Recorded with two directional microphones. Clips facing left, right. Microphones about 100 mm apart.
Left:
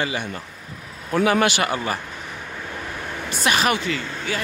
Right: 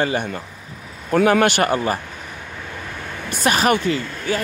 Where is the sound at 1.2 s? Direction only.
50° right (ahead or behind).